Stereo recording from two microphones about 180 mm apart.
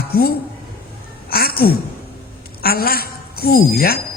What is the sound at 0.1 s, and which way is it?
Speech, 55° left (ahead or behind).